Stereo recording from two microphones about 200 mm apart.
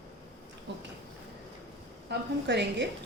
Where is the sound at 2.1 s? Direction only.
60° right (ahead or behind).